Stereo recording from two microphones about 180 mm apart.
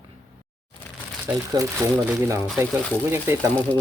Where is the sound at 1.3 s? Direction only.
15° right (ahead or behind).